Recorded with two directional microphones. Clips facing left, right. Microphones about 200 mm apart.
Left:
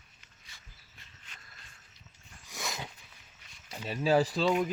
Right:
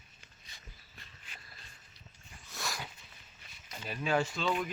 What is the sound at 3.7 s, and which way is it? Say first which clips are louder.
Speech: left 5 dB; 30° left (ahead or behind).